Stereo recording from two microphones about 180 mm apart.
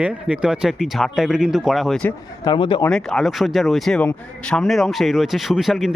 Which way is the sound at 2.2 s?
20° left (ahead or behind).